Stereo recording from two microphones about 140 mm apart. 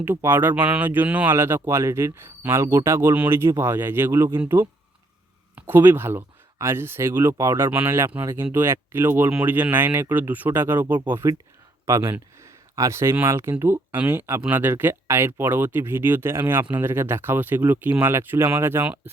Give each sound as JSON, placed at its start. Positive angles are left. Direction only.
{"t": 0.0, "sound": "speech", "side_deg": -15}